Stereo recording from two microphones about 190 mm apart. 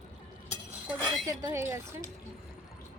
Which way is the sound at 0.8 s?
5° right (ahead or behind).